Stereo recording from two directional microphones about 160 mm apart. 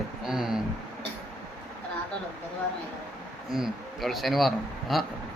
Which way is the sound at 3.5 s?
Centre (ahead or behind).